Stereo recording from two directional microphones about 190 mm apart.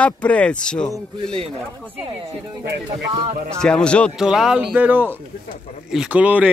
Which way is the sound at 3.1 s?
25° right (ahead or behind).